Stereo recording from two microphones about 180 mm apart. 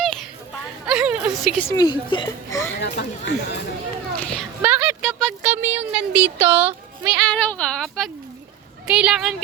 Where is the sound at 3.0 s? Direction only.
70° left (ahead or behind).